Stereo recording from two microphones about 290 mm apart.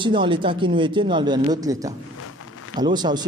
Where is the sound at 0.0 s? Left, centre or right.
Centre.